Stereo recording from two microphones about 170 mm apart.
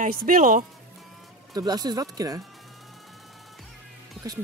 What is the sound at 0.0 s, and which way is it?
Speech, 55° right (ahead or behind).